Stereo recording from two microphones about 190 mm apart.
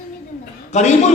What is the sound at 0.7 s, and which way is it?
Speech, 35° left (ahead or behind).